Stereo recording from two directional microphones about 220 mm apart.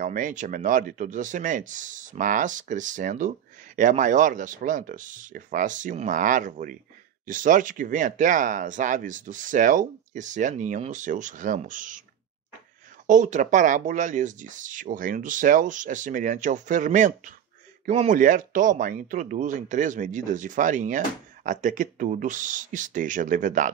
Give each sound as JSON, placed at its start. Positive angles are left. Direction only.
{"t": 0.0, "sound": "speech", "side_deg": -35}
{"t": 13.0, "sound": "speech", "side_deg": -35}